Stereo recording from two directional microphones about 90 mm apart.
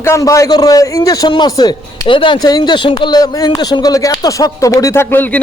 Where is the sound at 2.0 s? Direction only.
65° left (ahead or behind).